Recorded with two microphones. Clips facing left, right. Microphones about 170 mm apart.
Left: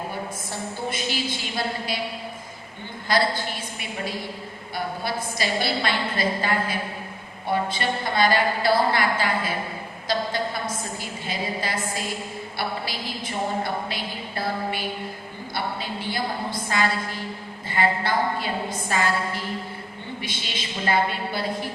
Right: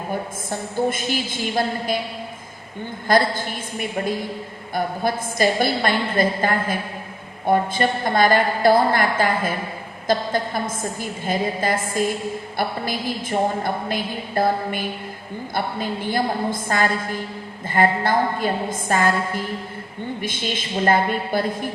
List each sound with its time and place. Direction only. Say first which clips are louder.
0.9 s a woman's voice: right 4 dB; 50° right (ahead or behind)
3.1 s a woman's voice: right 4 dB; 50° right (ahead or behind)